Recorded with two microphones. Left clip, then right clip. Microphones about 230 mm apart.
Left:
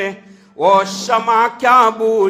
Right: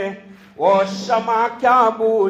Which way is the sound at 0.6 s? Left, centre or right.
Left.